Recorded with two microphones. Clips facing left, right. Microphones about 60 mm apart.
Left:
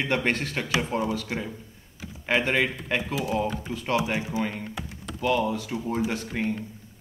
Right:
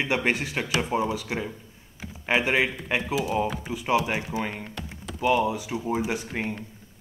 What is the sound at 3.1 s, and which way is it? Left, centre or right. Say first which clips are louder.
A man's voice: right 2 dB; centre.